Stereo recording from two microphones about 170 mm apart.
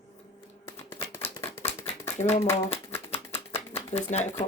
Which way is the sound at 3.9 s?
40° left (ahead or behind).